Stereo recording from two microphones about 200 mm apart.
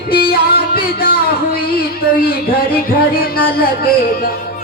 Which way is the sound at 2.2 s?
50° left (ahead or behind).